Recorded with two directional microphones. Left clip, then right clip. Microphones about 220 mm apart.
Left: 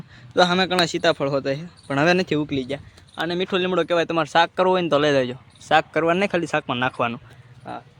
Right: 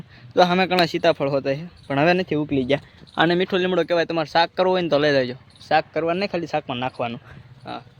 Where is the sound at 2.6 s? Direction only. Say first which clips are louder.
Right 8 dB; 45° right (ahead or behind).